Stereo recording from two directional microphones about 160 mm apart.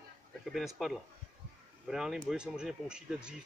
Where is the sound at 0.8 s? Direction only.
Centre (ahead or behind).